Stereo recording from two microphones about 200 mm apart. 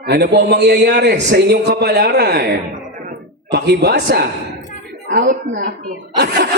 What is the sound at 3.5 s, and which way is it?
Speech, 55° right (ahead or behind).